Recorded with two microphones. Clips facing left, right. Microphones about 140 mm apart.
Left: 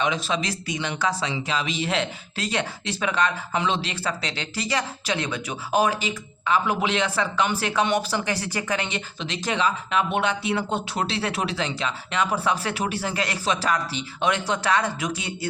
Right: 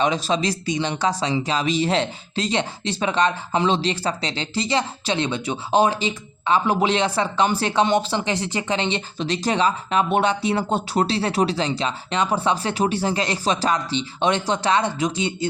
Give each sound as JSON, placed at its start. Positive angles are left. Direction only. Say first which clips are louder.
{"t": 0.0, "sound": "speech", "louder": "right 4 dB", "side_deg": -35}
{"t": 9.1, "sound": "speech", "louder": "right 4 dB", "side_deg": -35}